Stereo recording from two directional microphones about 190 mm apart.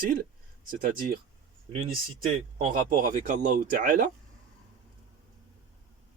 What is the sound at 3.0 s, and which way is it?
Speech, 45° right (ahead or behind).